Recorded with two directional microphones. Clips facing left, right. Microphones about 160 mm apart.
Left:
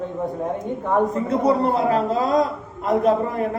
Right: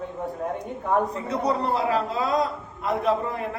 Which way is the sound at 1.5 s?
45° left (ahead or behind).